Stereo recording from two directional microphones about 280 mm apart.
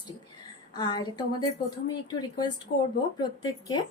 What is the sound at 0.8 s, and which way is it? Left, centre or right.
Speech, centre.